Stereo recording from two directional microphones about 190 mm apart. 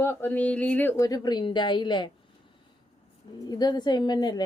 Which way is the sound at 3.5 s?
20° left (ahead or behind).